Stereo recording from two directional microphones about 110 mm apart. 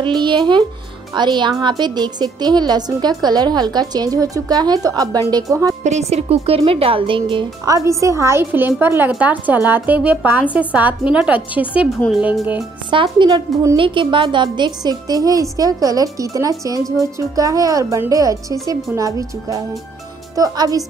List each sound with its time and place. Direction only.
0.0 s a woman's voice: 45° right (ahead or behind)
5.9 s speech: 85° right; by 7.4 s 50° right (ahead or behind)
7.6 s a woman's voice: 30° right (ahead or behind); by 11.9 s 10° right (ahead or behind)
12.9 s a woman's voice: 50° right (ahead or behind)